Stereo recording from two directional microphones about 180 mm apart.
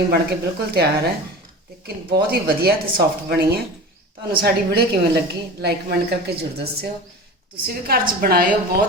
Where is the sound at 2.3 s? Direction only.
60° right (ahead or behind).